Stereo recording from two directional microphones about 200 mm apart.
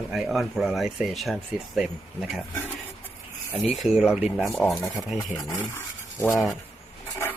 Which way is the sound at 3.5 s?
Centre (ahead or behind).